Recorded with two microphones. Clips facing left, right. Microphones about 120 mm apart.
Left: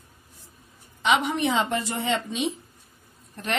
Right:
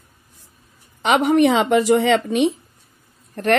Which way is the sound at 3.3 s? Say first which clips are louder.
Right 11 dB; 55° right (ahead or behind).